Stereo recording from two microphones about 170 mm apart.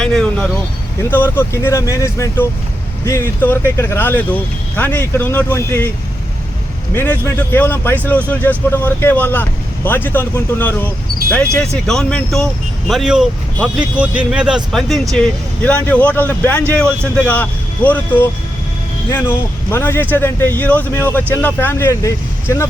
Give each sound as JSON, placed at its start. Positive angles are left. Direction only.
{"t": 0.0, "sound": "vehicle", "side_deg": 5}
{"t": 1.1, "sound": "speech", "side_deg": 15}
{"t": 6.9, "sound": "speech", "side_deg": 10}